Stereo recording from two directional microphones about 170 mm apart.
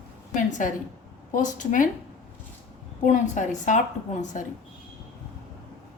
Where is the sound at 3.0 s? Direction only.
45° left (ahead or behind).